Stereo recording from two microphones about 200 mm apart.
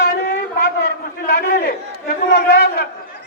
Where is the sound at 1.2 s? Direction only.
50° left (ahead or behind).